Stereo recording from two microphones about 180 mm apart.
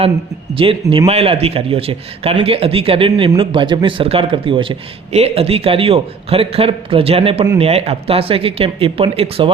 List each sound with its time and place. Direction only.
0.5 s a man's voice: 30° right (ahead or behind)